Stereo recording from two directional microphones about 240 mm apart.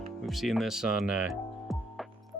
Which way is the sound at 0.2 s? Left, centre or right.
Centre.